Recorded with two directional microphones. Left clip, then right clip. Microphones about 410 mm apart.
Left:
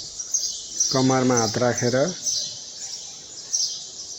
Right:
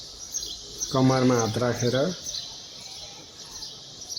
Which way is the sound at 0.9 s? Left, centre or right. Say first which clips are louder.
Left 1 dB; right.